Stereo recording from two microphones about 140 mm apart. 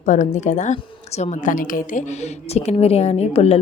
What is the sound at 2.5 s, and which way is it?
Speech, 50° left (ahead or behind).